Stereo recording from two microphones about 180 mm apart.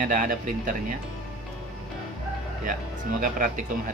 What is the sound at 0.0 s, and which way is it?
Speech, 45° right (ahead or behind).